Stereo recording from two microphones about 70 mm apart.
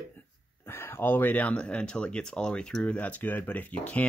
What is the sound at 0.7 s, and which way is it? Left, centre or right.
Speech, left.